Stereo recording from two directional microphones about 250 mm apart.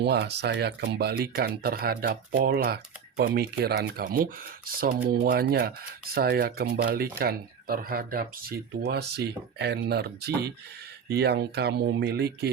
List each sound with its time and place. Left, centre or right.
0.0 s speech: right